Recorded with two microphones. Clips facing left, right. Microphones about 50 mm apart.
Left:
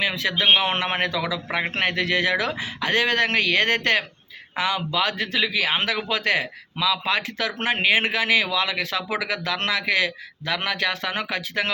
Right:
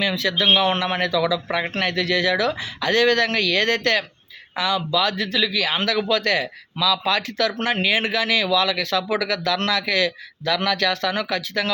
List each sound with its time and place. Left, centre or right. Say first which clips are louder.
0.0 s a man's voice: right 1 dB; left